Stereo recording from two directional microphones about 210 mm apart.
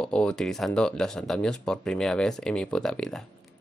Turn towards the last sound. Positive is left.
turn(degrees=5)  # may be behind; listen again after turning